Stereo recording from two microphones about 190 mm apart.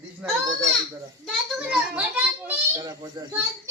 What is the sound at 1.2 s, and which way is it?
A child's voice, 5° right (ahead or behind).